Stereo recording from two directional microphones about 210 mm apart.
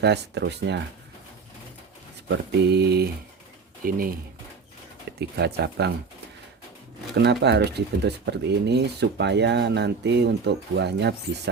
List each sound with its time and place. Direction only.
0.0 s speech: 55° right (ahead or behind)
2.2 s speech: 50° right (ahead or behind)
5.1 s a sound: 50° right (ahead or behind)
5.4 s speech: 50° right (ahead or behind)
7.2 s speech: 55° right (ahead or behind)